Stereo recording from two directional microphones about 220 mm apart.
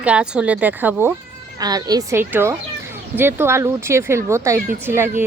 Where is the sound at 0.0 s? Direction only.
5° right (ahead or behind).